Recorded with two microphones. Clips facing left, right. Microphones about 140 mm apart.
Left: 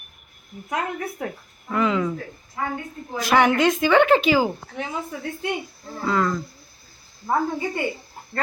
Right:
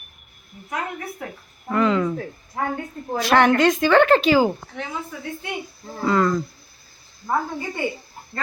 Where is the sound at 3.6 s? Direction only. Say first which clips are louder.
Right 1 dB; 10° left (ahead or behind).